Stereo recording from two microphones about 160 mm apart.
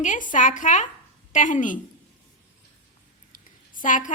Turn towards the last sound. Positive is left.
turn(degrees=55)  # may be behind; listen again after turning